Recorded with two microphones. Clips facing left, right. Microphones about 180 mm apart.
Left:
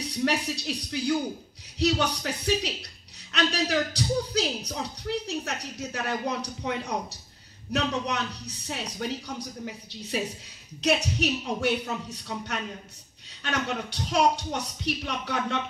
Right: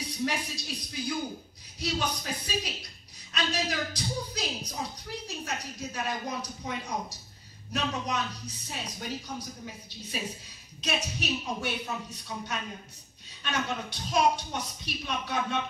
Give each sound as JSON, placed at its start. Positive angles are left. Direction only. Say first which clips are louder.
{"t": 0.0, "sound": "speech", "louder": "left 5 dB", "side_deg": 70}
{"t": 10.8, "sound": "speech", "louder": "left 8 dB", "side_deg": 70}